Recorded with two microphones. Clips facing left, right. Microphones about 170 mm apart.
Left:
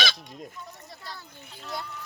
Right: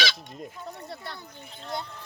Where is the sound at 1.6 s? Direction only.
25° right (ahead or behind).